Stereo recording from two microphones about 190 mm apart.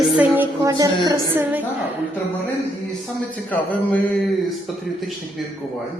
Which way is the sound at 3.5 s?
10° left (ahead or behind).